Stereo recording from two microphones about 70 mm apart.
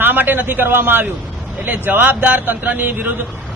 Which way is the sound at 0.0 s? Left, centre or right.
Right.